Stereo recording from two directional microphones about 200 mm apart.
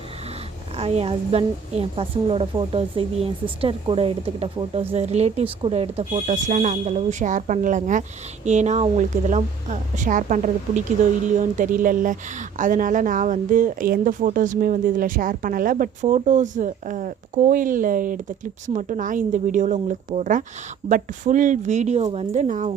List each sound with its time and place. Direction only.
0.8 s a woman's voice: 30° right (ahead or behind)